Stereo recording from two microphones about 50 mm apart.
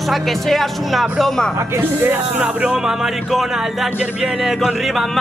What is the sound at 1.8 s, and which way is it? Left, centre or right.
Speech, right.